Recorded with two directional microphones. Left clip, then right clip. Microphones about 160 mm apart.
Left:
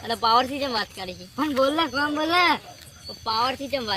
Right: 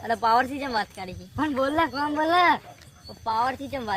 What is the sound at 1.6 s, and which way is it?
Speech, centre (ahead or behind).